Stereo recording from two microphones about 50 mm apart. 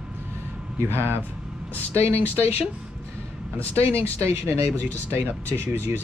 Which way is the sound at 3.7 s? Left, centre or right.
Right.